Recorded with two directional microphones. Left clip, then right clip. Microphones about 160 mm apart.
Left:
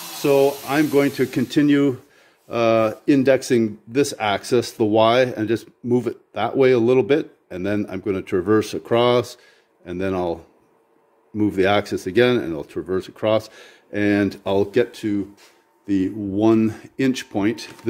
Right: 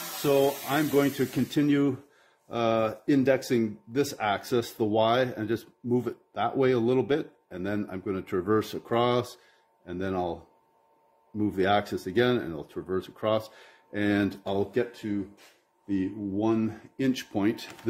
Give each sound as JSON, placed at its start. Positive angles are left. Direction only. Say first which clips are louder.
{"t": 0.2, "sound": "speech", "louder": "left 7 dB", "side_deg": 20}
{"t": 14.4, "sound": "speech", "louder": "left 9 dB", "side_deg": 40}
{"t": 17.0, "sound": "speech", "louder": "left 7 dB", "side_deg": 25}